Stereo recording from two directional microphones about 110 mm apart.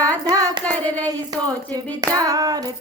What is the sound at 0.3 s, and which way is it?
Carnatic music, 35° right (ahead or behind).